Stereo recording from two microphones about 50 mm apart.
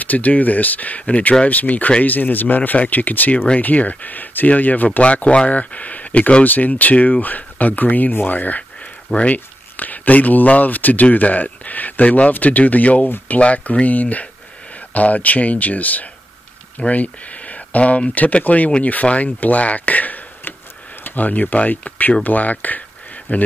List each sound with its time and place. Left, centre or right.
0.0 s speech: left